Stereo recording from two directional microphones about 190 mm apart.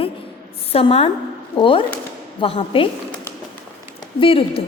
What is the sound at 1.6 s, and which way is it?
A woman's voice, 25° left (ahead or behind).